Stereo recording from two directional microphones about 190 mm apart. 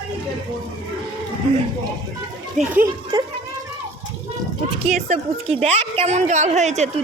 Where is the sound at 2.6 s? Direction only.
10° right (ahead or behind).